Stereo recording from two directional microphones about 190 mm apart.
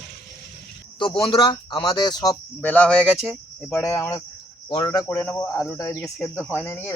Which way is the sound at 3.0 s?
10° right (ahead or behind).